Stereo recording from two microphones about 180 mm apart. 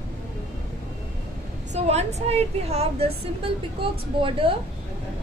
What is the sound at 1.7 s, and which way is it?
A woman's voice, 35° right (ahead or behind).